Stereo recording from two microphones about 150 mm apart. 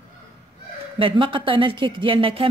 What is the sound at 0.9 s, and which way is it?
A woman's voice, 35° right (ahead or behind).